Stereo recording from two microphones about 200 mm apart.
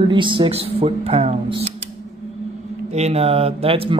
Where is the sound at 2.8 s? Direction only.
35° right (ahead or behind).